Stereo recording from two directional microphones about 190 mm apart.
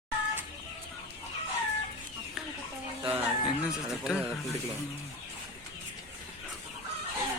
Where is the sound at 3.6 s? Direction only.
5° right (ahead or behind).